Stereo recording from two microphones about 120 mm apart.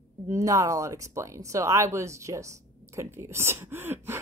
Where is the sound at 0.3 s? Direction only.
25° right (ahead or behind).